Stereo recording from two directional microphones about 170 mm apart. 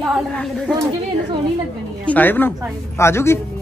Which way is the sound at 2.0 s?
10° left (ahead or behind).